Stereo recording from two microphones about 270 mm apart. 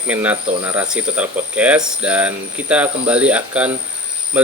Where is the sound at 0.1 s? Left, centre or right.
Centre.